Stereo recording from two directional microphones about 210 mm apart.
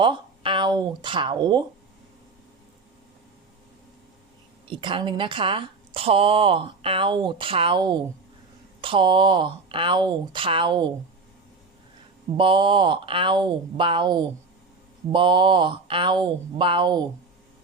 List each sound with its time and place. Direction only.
0.0 s speech: 25° right (ahead or behind)
4.7 s speech: 25° right (ahead or behind)
12.4 s speech: 25° right (ahead or behind)